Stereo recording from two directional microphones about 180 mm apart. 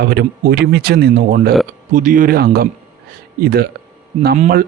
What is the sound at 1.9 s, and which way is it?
Speech, 45° right (ahead or behind).